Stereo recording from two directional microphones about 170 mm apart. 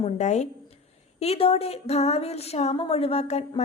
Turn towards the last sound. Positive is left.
turn(degrees=40)  # may be behind; listen again after turning